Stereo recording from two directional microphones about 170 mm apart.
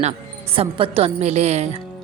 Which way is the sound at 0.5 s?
30° right (ahead or behind).